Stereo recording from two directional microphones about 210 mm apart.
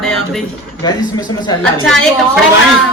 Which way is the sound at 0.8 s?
20° left (ahead or behind).